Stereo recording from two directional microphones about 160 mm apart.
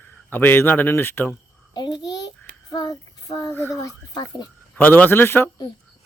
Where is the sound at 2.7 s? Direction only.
25° left (ahead or behind).